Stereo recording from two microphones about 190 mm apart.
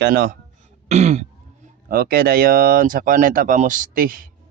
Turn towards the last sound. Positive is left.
turn(degrees=-50)  # may be behind; listen again after turning